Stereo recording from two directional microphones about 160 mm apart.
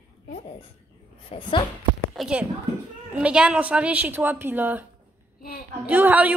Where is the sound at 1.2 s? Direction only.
30° left (ahead or behind).